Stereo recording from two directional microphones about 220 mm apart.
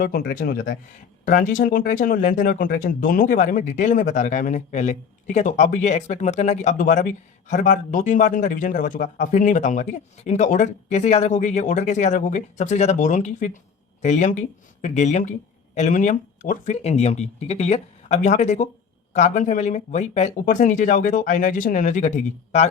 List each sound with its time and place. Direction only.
0.0 s speech: 40° left (ahead or behind)